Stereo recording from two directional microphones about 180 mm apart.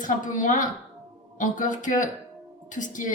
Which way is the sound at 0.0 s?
45° left (ahead or behind).